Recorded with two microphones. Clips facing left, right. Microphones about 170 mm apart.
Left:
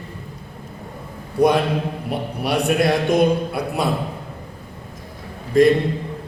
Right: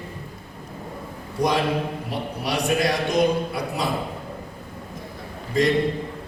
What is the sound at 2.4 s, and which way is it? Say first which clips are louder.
A man's voice: left 4 dB; 60° left (ahead or behind).